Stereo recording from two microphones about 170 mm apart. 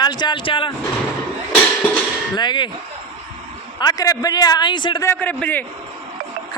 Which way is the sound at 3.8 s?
20° left (ahead or behind).